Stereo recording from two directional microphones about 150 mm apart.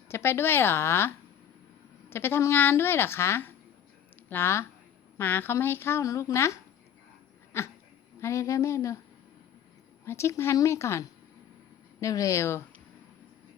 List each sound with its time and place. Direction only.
0.1 s speech: 15° left (ahead or behind)
10.1 s speech: 20° left (ahead or behind)